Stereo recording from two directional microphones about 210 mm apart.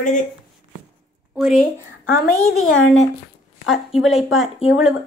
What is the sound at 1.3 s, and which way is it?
Speech, centre (ahead or behind).